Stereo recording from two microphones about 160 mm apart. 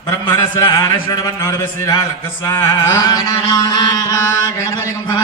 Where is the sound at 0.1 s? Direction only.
20° left (ahead or behind).